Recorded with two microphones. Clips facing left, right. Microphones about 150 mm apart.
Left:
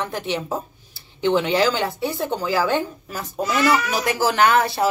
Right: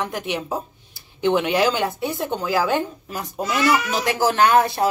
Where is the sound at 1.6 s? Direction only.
20° right (ahead or behind).